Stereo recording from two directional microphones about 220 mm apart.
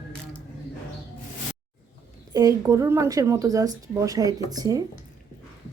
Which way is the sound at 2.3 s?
15° right (ahead or behind).